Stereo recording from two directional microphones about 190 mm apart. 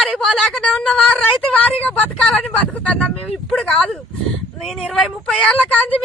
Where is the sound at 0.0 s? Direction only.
Centre (ahead or behind).